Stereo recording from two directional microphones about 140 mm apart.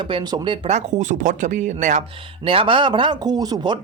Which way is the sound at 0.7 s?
60° right (ahead or behind).